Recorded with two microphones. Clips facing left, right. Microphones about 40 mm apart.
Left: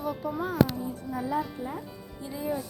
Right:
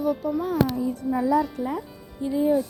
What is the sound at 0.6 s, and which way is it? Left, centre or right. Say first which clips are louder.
Speech: left 1 dB; right.